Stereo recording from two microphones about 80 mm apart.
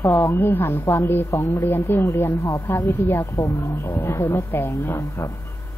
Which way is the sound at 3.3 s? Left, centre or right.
Left.